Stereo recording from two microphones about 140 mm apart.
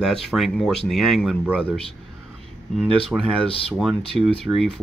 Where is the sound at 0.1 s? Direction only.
Centre (ahead or behind).